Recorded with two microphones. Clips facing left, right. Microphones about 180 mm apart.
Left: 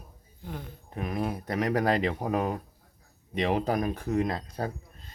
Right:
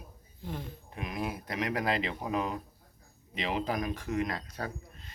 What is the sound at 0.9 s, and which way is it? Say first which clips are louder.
Speech: left 5 dB; 35° left (ahead or behind).